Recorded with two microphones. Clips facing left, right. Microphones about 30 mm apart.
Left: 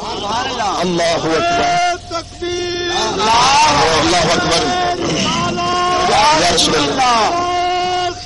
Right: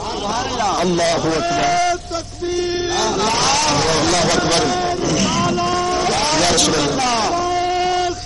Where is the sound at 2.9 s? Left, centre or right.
Left.